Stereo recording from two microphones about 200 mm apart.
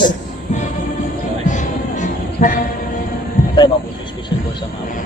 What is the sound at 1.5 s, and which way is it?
Music, 40° left (ahead or behind).